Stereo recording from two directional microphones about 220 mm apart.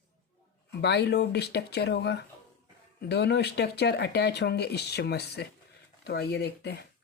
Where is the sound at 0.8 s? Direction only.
50° left (ahead or behind).